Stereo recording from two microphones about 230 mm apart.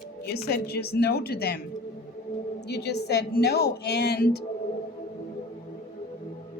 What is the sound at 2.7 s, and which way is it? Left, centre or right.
Speech, left.